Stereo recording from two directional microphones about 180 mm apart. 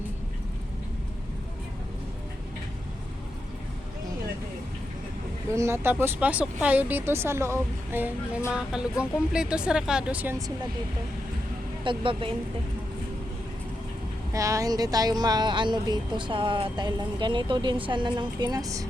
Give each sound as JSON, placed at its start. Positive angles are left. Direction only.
{"t": 5.5, "sound": "speech", "side_deg": -15}
{"t": 11.8, "sound": "speech", "side_deg": -30}
{"t": 14.3, "sound": "speech", "side_deg": -20}